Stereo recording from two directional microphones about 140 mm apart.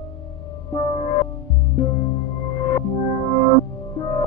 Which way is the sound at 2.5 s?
25° left (ahead or behind).